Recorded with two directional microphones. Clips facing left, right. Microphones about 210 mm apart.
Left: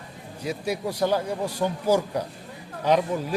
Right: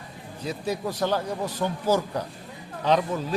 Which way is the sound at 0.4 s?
10° left (ahead or behind).